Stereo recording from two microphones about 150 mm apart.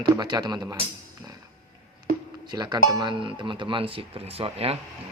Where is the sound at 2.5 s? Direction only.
30° right (ahead or behind).